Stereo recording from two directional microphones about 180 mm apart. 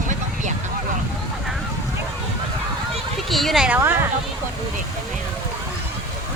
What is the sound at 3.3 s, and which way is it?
Speech, centre (ahead or behind).